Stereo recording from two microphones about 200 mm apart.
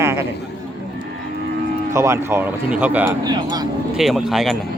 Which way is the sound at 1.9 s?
15° right (ahead or behind).